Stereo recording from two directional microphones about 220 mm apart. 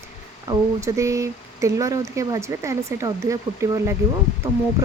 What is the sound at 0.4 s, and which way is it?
Speech, 15° right (ahead or behind).